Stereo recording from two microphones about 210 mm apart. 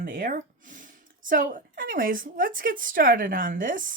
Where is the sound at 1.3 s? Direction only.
40° right (ahead or behind).